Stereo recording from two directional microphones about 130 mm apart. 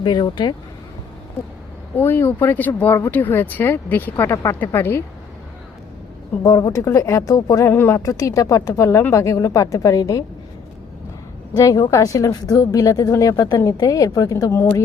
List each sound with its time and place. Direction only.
0.0 s speech: 35° left (ahead or behind)
2.0 s speech: 15° left (ahead or behind)
6.4 s speech: 25° left (ahead or behind)
11.5 s speech: 25° left (ahead or behind)